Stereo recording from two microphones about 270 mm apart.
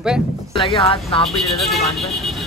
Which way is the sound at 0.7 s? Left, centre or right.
Left.